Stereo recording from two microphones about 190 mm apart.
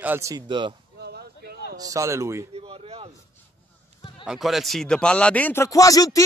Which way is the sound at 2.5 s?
30° right (ahead or behind).